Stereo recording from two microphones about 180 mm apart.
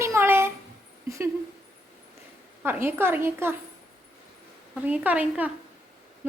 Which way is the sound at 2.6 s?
10° right (ahead or behind).